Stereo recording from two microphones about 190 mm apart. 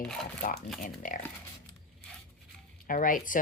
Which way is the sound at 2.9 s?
45° left (ahead or behind).